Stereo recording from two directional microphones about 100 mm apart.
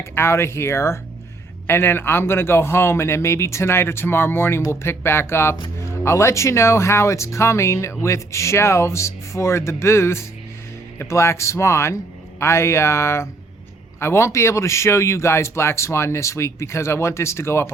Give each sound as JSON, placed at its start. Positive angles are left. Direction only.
{"t": 0.0, "sound": "speech", "side_deg": 25}